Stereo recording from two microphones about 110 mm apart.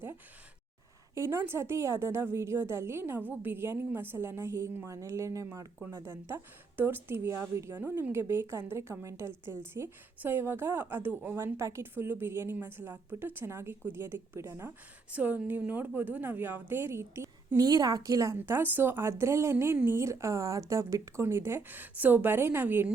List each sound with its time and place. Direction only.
1.1 s a woman's voice: 25° right (ahead or behind)
17.6 s a woman's voice: 35° right (ahead or behind)
18.3 s a woman's voice: 20° right (ahead or behind)